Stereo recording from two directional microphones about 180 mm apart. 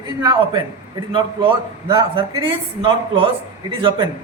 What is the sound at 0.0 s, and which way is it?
A man's voice, 25° right (ahead or behind).